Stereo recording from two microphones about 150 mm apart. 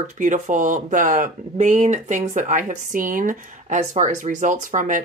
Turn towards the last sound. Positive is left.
turn(degrees=-55)  # may be behind; listen again after turning